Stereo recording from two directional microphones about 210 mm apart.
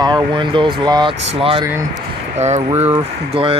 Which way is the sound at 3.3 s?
25° right (ahead or behind).